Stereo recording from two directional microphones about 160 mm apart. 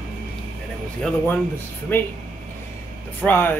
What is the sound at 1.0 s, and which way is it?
Speech, 10° left (ahead or behind).